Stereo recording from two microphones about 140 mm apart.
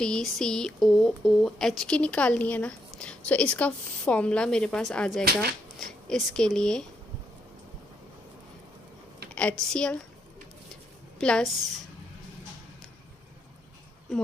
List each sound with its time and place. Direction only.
0.0 s speech: 5° left (ahead or behind)
9.3 s a woman's voice: 10° left (ahead or behind)
11.1 s a woman's voice: 5° left (ahead or behind)